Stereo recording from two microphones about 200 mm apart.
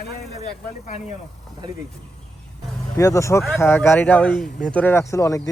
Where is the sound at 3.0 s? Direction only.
15° left (ahead or behind).